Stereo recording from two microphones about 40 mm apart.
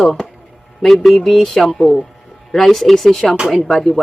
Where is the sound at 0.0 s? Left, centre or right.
Centre.